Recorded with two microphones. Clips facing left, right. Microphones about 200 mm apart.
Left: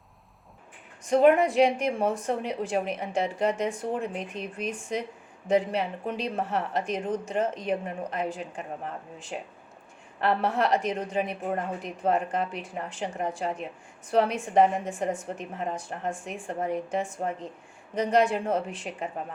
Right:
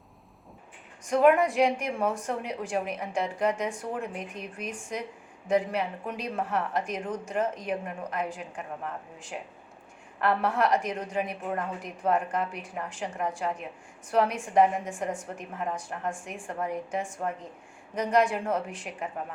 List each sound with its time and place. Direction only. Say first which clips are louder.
1.1 s a woman's voice: left 2 dB; 25° left (ahead or behind)
10.2 s a woman's voice: left 1 dB; 25° left (ahead or behind)